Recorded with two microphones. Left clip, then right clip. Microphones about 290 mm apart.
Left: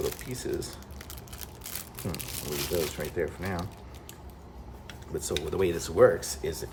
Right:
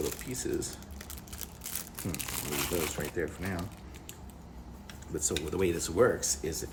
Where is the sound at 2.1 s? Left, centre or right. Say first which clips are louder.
Even; centre.